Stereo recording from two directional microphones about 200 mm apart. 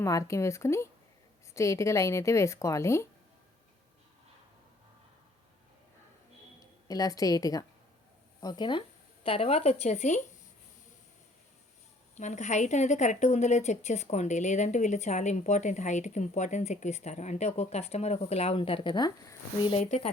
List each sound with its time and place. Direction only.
0.0 s a woman's voice: 15° left (ahead or behind)
6.6 s a woman's voice: 15° left (ahead or behind); by 10.2 s 35° left (ahead or behind)
12.1 s a woman's voice: 35° left (ahead or behind)
19.8 s a woman's voice: 35° left (ahead or behind)